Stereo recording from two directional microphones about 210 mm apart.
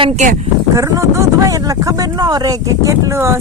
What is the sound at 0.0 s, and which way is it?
Speech, 35° right (ahead or behind).